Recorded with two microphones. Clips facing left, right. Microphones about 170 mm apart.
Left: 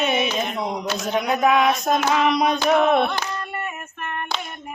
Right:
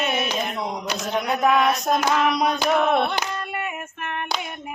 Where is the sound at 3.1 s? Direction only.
15° right (ahead or behind).